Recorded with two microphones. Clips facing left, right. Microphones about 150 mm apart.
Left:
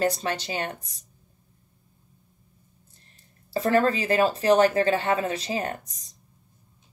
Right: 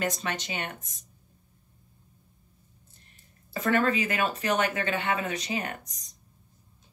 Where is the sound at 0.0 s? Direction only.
35° left (ahead or behind).